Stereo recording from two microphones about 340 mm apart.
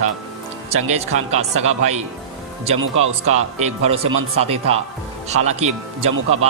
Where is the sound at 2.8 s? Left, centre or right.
Right.